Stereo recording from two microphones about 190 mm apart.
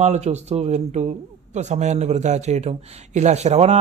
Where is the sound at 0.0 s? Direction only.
35° right (ahead or behind).